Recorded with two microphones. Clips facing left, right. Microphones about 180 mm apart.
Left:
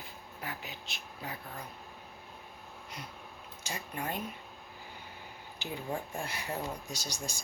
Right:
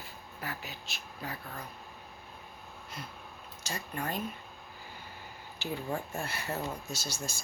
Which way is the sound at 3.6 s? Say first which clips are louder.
Right 1 dB; 10° left (ahead or behind).